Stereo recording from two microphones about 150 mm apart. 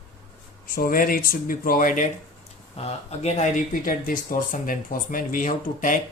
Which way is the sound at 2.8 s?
45° left (ahead or behind).